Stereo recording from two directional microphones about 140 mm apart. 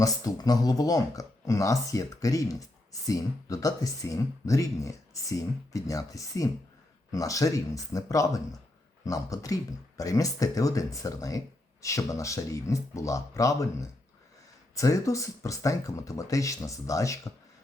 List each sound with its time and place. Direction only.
0.0 s speech: 25° left (ahead or behind)
14.8 s speech: 25° left (ahead or behind)